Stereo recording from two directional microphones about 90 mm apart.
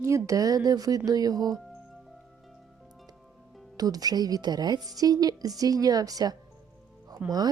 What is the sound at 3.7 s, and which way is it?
A woman's voice, 45° right (ahead or behind).